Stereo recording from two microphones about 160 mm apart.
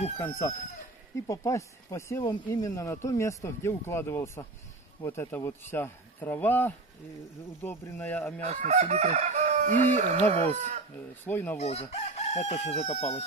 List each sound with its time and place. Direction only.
0.2 s speech: 15° left (ahead or behind)
8.5 s chicken: 45° right (ahead or behind)
11.2 s speech: 15° left (ahead or behind)
11.5 s chicken: 40° left (ahead or behind)